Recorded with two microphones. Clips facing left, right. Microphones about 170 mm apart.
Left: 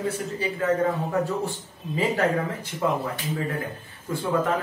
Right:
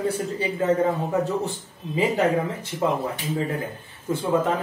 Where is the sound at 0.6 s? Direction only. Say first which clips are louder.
Right 2 dB; 20° right (ahead or behind).